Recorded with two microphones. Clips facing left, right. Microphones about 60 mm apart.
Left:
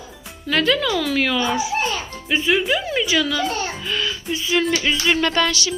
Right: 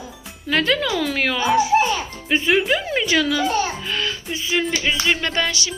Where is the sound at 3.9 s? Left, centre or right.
Right.